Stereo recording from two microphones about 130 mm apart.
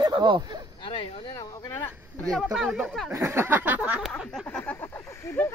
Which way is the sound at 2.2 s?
Centre (ahead or behind).